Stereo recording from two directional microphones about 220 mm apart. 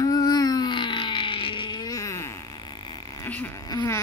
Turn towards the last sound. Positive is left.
turn(degrees=15)  # may be behind; listen again after turning